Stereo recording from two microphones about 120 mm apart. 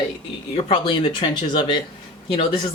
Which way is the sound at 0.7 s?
40° left (ahead or behind).